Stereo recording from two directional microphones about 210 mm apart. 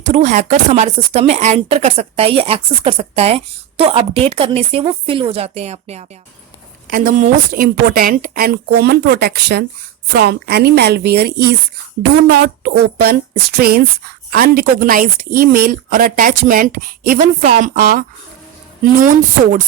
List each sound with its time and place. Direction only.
0.0 s a woman's voice: 35° right (ahead or behind)